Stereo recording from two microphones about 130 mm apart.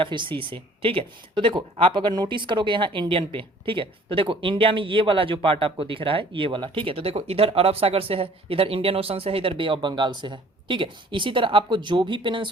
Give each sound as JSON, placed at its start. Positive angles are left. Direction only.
{"t": 0.0, "sound": "speech", "side_deg": -40}